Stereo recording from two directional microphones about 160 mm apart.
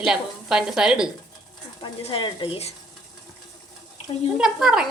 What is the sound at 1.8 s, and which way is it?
Speech, 30° left (ahead or behind).